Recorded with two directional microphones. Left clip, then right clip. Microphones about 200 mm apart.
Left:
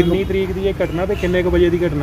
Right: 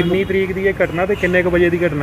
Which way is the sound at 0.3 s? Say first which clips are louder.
Right 2 dB; 40° right (ahead or behind).